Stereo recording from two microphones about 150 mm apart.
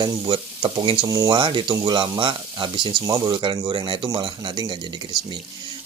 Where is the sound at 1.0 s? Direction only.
25° right (ahead or behind).